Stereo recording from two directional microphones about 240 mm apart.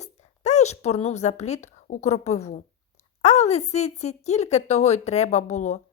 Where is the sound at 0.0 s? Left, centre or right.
Left.